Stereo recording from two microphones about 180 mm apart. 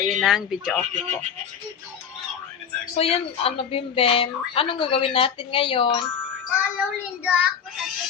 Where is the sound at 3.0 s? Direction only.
30° left (ahead or behind).